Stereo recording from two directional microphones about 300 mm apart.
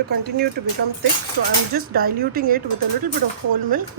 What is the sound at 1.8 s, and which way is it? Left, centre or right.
Speech, right.